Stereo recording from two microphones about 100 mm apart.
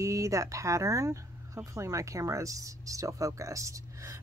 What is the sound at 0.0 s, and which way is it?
Speech, 30° right (ahead or behind).